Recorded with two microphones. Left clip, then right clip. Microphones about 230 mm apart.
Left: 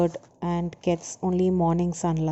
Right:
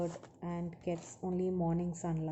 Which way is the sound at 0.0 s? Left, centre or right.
Left.